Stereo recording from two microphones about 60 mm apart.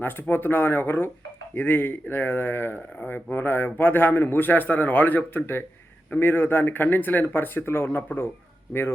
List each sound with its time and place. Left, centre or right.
0.0 s a man's voice: left